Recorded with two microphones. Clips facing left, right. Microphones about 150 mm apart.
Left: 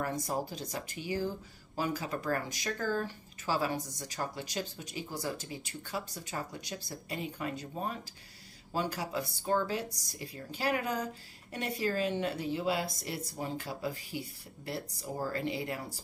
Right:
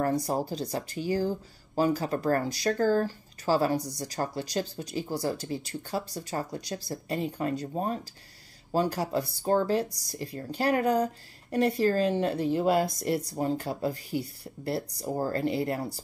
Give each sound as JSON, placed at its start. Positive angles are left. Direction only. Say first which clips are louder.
{"t": 0.0, "sound": "speech", "louder": "right 7 dB", "side_deg": -40}